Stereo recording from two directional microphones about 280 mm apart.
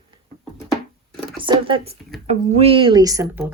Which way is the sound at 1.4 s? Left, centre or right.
Centre.